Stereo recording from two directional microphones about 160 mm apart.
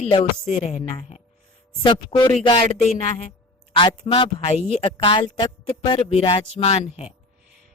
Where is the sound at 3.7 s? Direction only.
30° left (ahead or behind).